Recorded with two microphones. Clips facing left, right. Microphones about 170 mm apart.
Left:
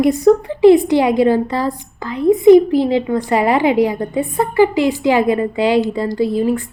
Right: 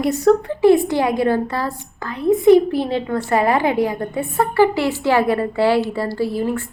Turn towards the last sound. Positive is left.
turn(degrees=15)  # may be behind; listen again after turning